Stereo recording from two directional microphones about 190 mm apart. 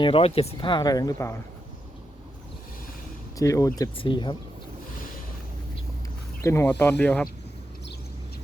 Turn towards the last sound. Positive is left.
turn(degrees=5)  # may be behind; listen again after turning